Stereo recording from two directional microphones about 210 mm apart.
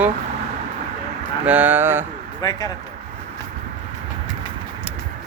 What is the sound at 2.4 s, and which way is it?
Speech, 20° left (ahead or behind).